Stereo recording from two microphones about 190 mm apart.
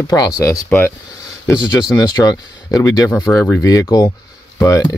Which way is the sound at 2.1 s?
20° left (ahead or behind).